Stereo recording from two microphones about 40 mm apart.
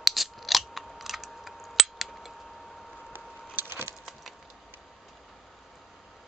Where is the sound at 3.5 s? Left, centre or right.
Right.